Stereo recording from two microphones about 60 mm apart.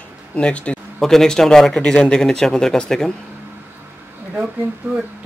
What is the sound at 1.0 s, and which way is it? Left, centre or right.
Speech, centre.